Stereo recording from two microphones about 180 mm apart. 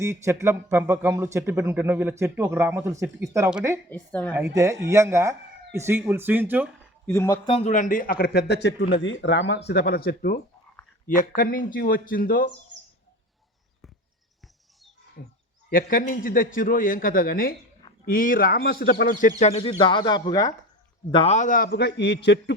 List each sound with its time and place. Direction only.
0.0 s speech: 15° right (ahead or behind)
3.8 s a woman's voice: 10° left (ahead or behind)
4.3 s speech: 15° right (ahead or behind)
7.1 s a woman's voice: 15° left (ahead or behind)
7.4 s a man's voice: 35° left (ahead or behind); by 9.6 s 85° left
9.6 s a man's voice: 65° left (ahead or behind)
12.7 s a sound: 85° right
15.2 s a man's voice: 65° left (ahead or behind)
15.7 s a man's voice: 50° left (ahead or behind)
19.4 s speech: 35° left (ahead or behind)
21.1 s a man's voice: 35° left (ahead or behind)
21.7 s a man's voice: 70° left (ahead or behind)